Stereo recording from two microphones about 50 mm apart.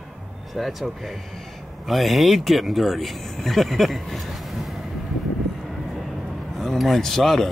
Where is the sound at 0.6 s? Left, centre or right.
Centre.